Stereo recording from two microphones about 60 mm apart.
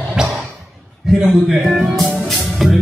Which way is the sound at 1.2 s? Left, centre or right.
Centre.